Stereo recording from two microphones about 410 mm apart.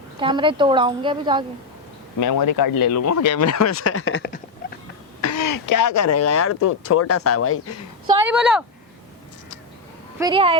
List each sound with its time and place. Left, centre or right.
0.2 s a woman's voice: centre
2.2 s speech: left
5.2 s speech: left
8.0 s speech: centre
10.2 s a woman's voice: centre